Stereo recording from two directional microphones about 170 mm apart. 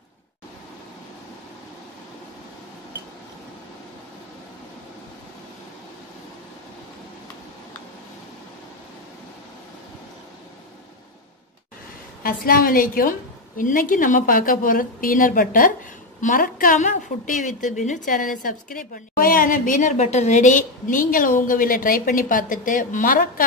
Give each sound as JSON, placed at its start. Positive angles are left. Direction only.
{"t": 12.2, "sound": "a woman's voice", "side_deg": 60}